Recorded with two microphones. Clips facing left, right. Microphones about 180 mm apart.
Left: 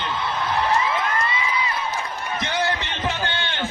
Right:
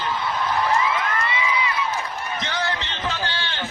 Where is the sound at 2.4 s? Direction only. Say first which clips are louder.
Left 4 dB; 15° left (ahead or behind).